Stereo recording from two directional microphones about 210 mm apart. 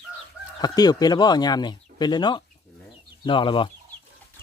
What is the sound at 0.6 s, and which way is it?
Speech, 20° left (ahead or behind).